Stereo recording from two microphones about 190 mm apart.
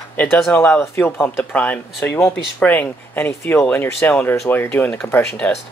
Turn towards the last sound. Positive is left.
turn(degrees=10)  # may be behind; listen again after turning